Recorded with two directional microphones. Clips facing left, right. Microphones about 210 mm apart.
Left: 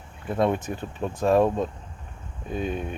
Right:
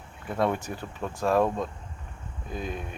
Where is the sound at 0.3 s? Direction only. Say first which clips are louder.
Left 3 dB; 20° left (ahead or behind).